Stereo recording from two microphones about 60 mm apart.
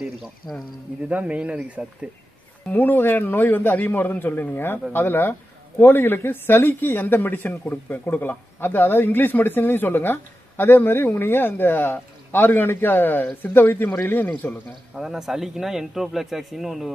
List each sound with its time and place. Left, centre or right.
0.4 s speech: centre
1.0 s speech: right
2.7 s speech: left
15.0 s speech: centre